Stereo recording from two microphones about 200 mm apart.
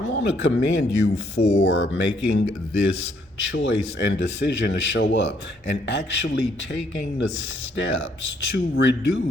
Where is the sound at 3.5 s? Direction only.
65° left (ahead or behind).